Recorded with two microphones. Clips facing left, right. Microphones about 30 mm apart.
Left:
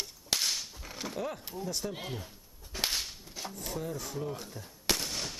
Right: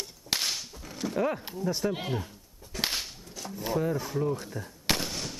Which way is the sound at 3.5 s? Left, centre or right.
Centre.